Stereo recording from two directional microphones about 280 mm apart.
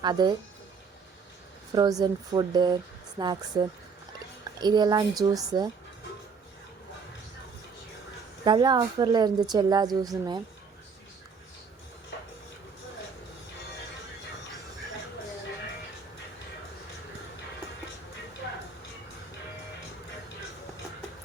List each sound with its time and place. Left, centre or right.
0.0 s a woman's voice: centre
1.7 s a woman's voice: centre
8.4 s a woman's voice: centre